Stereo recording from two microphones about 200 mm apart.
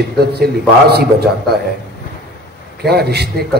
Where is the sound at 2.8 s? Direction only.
55° right (ahead or behind).